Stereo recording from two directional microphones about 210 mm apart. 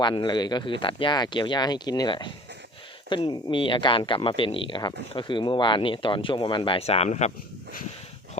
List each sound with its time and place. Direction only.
0.0 s speech: 20° left (ahead or behind); by 7.9 s 35° left (ahead or behind)